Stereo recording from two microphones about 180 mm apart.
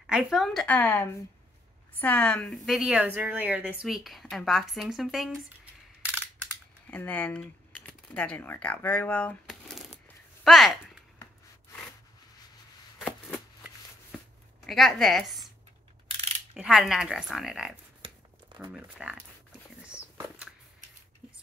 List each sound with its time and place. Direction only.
0.0 s a woman's voice: 5° right (ahead or behind)
6.9 s speech: 10° left (ahead or behind)
14.7 s a woman's voice: centre (ahead or behind)
16.1 s mechanisms: 35° right (ahead or behind)
16.5 s a woman's voice: centre (ahead or behind)
18.0 s a sound: 25° right (ahead or behind)
18.7 s speech: 5° right (ahead or behind)
19.9 s biting: 5° right (ahead or behind)